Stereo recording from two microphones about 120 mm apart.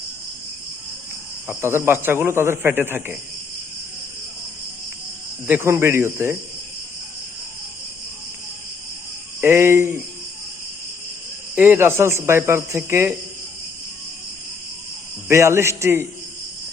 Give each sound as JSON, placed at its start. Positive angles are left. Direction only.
{"t": 1.5, "sound": "a man's voice", "side_deg": -20}
{"t": 5.5, "sound": "a man's voice", "side_deg": -20}
{"t": 9.4, "sound": "a man's voice", "side_deg": -20}
{"t": 11.5, "sound": "a man's voice", "side_deg": -15}
{"t": 15.3, "sound": "a man's voice", "side_deg": -25}